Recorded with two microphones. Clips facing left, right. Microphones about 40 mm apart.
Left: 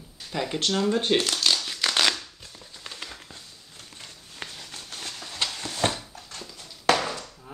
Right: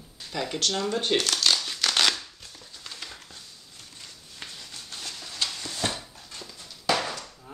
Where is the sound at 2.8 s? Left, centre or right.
Left.